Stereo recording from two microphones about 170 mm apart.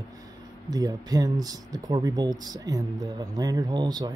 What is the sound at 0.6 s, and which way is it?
Speech, 20° right (ahead or behind).